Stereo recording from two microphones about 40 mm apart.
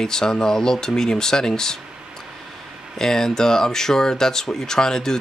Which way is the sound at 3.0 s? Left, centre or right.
Centre.